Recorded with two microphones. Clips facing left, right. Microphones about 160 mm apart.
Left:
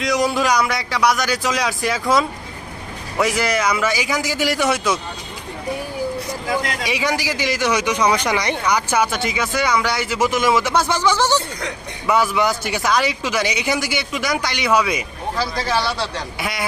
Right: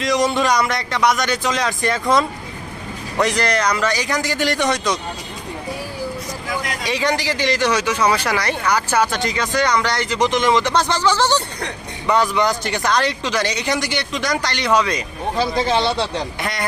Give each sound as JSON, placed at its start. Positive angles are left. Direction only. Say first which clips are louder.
{"t": 0.0, "sound": "a man's voice", "louder": "right 1 dB", "side_deg": 0}
{"t": 6.8, "sound": "speech", "louder": "right 1 dB", "side_deg": 10}
{"t": 15.4, "sound": "speech", "louder": "right 4 dB", "side_deg": -20}
{"t": 16.4, "sound": "speech", "louder": "right 1 dB", "side_deg": 5}